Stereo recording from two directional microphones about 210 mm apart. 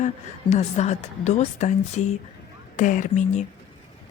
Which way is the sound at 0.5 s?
35° left (ahead or behind).